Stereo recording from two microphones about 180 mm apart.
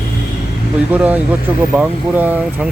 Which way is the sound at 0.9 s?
10° right (ahead or behind).